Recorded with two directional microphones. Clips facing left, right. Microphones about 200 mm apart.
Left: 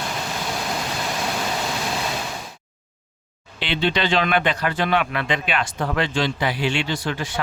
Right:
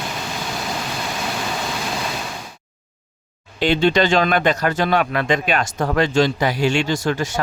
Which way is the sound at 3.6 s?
45° right (ahead or behind).